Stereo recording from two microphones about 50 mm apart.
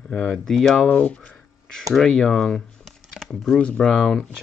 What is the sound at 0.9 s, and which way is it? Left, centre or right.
Speech, left.